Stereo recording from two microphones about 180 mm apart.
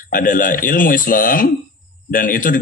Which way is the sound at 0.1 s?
50° left (ahead or behind).